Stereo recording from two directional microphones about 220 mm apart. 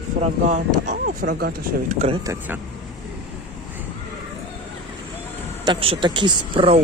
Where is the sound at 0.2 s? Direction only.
35° right (ahead or behind).